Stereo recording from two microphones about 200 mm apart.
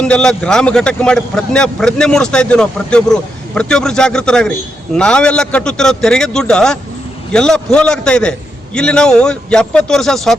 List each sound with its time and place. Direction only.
0.0 s speech: 5° left (ahead or behind)